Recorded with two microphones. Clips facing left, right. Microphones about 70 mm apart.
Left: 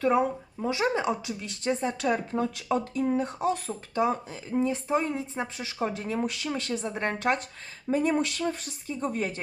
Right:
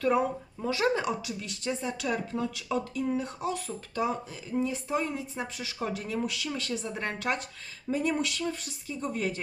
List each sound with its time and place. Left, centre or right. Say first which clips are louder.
0.0 s speech: left 2 dB; left
1.4 s speech: left 5 dB; left
3.7 s speech: left 4 dB; left